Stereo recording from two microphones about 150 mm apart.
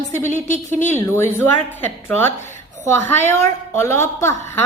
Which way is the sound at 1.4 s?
15° left (ahead or behind).